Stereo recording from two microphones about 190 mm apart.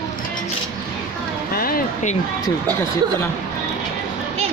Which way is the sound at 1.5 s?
50° left (ahead or behind).